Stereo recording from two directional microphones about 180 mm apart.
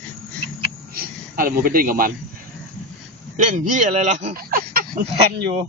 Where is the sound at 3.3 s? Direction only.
45° right (ahead or behind).